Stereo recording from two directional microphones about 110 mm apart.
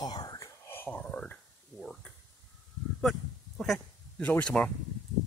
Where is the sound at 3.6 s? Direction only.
5° left (ahead or behind).